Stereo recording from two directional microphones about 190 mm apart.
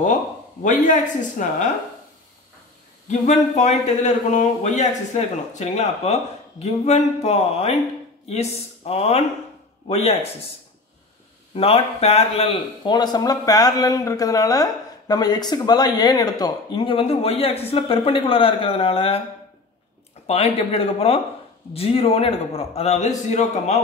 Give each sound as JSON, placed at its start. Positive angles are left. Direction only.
{"t": 1.4, "sound": "speech", "side_deg": 40}
{"t": 3.1, "sound": "speech", "side_deg": 40}
{"t": 11.5, "sound": "a man's voice", "side_deg": 30}
{"t": 20.2, "sound": "speech", "side_deg": 30}